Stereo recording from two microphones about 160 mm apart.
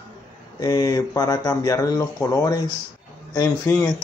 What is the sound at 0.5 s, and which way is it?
A man's voice, 25° left (ahead or behind).